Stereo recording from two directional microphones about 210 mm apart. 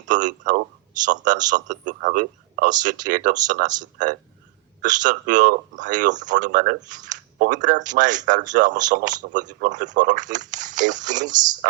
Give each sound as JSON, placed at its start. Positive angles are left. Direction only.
{"t": 0.0, "sound": "a man's voice", "side_deg": -35}